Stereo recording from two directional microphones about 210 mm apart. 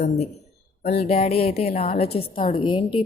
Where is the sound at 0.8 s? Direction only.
50° left (ahead or behind).